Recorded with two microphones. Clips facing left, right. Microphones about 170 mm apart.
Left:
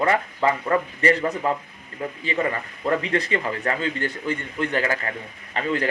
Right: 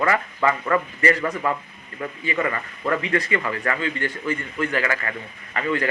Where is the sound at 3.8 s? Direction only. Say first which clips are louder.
Even; centre (ahead or behind).